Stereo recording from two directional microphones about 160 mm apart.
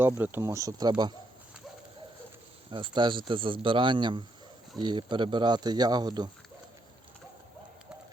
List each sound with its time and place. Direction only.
0.0 s speech: 15° right (ahead or behind)
2.6 s a man's voice: 30° right (ahead or behind)